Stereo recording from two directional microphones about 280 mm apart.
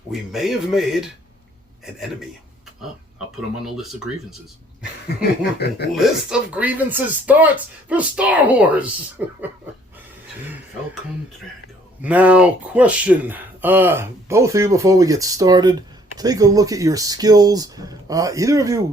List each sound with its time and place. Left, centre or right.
0.1 s speech: centre
3.8 s speech: centre
5.4 s speech: left
5.9 s speech: centre
12.0 s speech: centre